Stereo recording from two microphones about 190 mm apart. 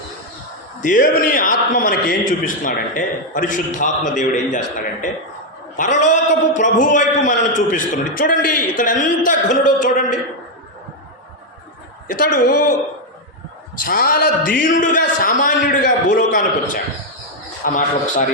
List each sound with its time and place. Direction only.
0.8 s a man's voice: 45° left (ahead or behind)
12.0 s a man's voice: 45° left (ahead or behind)
13.8 s a man's voice: 50° left (ahead or behind)
17.7 s a man's voice: 40° left (ahead or behind)